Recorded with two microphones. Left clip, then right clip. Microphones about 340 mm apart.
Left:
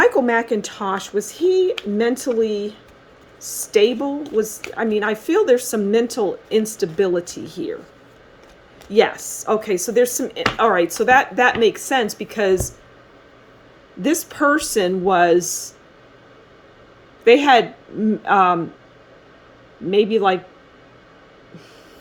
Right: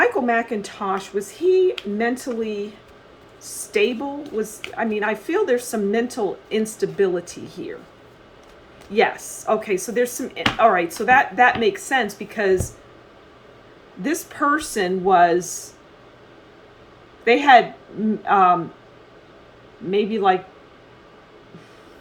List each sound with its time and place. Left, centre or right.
0.0 s speech: left
3.7 s speech: left
8.9 s speech: left
14.0 s speech: left
17.2 s speech: left
19.9 s speech: left